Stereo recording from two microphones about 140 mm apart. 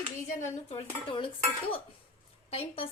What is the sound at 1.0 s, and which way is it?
Dishes, 40° left (ahead or behind).